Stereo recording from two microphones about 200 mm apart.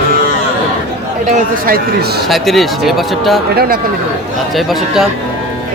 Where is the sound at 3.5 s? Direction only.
50° right (ahead or behind).